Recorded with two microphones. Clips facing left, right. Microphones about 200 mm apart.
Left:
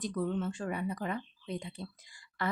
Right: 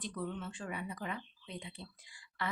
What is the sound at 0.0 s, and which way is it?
Speech, 45° left (ahead or behind).